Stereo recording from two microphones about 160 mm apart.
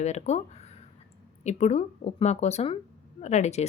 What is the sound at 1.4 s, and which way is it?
Speech, 45° left (ahead or behind).